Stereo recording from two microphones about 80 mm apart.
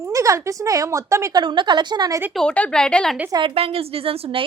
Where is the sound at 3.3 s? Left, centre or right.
Right.